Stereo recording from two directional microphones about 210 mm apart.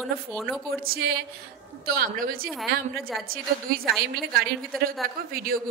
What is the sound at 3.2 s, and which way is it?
Speech, 45° right (ahead or behind).